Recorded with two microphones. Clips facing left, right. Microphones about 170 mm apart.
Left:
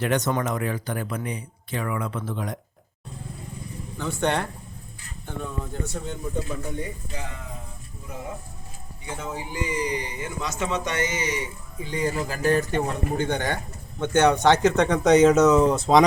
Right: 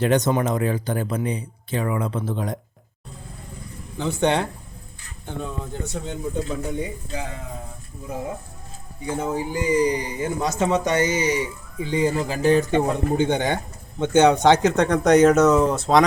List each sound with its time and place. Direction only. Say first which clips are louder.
0.0 s speech: right 4 dB; 20° right (ahead or behind)
3.9 s speech: right 4 dB; 20° right (ahead or behind)
9.0 s speech: right 8 dB; 35° right (ahead or behind); by 16.0 s 5° right (ahead or behind)